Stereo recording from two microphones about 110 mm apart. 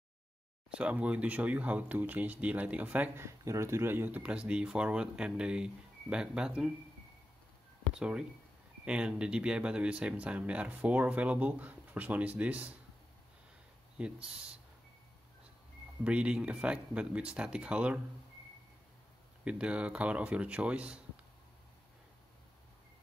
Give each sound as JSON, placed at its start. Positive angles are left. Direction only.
{"t": 0.7, "sound": "speech", "side_deg": -10}
{"t": 3.3, "sound": "speech", "side_deg": -25}
{"t": 7.9, "sound": "speech", "side_deg": -10}
{"t": 13.9, "sound": "speech", "side_deg": -10}
{"t": 16.0, "sound": "speech", "side_deg": -10}
{"t": 19.4, "sound": "speech", "side_deg": -10}